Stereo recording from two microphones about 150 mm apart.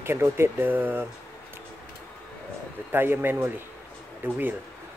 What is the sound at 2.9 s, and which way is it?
Speech, 15° right (ahead or behind).